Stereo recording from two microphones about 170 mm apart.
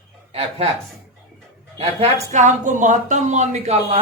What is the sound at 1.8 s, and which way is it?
Speech, 40° right (ahead or behind).